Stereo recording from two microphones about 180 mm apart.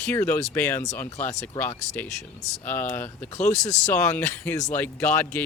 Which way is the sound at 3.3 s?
40° left (ahead or behind).